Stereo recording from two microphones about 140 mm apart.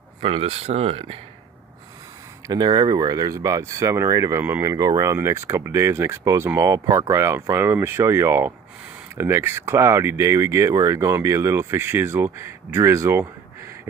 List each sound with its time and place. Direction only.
0.2 s speech: 45° right (ahead or behind)
2.4 s speech: 30° right (ahead or behind)